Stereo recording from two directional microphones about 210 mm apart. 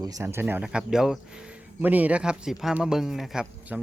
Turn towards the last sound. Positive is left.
turn(degrees=-5)  # may be behind; listen again after turning